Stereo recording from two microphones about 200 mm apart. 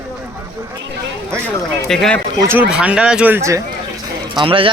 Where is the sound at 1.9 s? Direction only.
5° left (ahead or behind).